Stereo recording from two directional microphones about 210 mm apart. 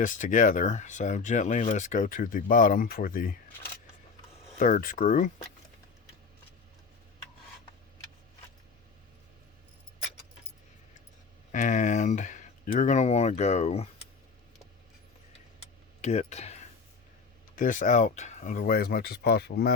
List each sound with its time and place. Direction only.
0.0 s speech: 40° left (ahead or behind)
4.5 s speech: 40° left (ahead or behind)
11.5 s speech: 35° left (ahead or behind)
16.0 s speech: 30° left (ahead or behind); by 19.7 s 50° left (ahead or behind)